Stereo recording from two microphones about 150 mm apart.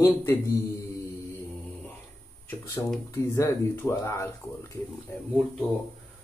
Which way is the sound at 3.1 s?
20° left (ahead or behind).